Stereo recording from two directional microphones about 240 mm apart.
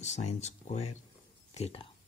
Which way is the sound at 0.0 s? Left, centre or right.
Left.